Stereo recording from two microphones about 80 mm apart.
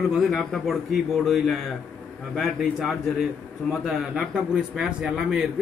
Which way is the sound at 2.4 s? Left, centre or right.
Centre.